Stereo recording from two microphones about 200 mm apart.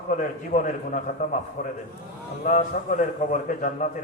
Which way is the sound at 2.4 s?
40° left (ahead or behind).